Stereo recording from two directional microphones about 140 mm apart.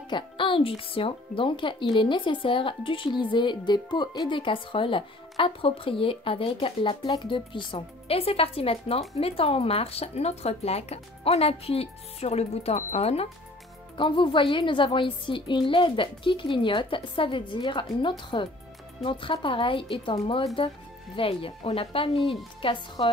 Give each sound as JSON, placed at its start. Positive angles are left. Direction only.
{"t": 0.1, "sound": "speech", "side_deg": 35}
{"t": 13.9, "sound": "speech", "side_deg": 35}